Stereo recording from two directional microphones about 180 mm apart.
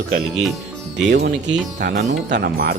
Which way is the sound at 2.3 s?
55° right (ahead or behind).